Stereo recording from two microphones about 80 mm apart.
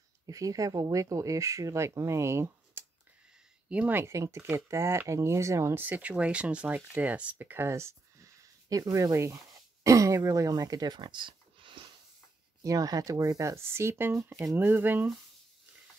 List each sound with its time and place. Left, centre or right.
0.3 s speech: right
3.6 s speech: centre
4.0 s speech: right
5.8 s speech: right
12.6 s speech: right